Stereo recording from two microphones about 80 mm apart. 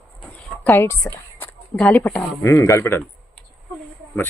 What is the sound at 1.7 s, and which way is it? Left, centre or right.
Speech, centre.